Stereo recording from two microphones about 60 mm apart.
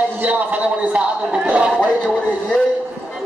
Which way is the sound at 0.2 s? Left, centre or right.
Right.